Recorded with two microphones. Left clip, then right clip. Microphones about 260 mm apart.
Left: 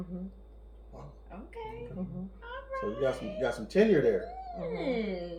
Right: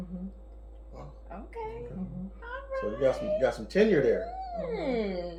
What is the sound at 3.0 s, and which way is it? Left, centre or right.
Speech, centre.